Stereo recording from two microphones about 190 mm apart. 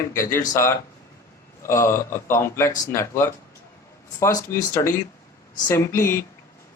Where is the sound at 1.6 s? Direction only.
15° left (ahead or behind).